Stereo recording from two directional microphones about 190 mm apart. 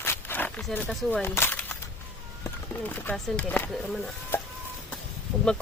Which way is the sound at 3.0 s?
5° left (ahead or behind).